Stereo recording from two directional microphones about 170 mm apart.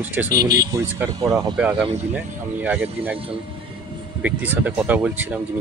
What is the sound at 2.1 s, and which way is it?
Speech, 10° right (ahead or behind).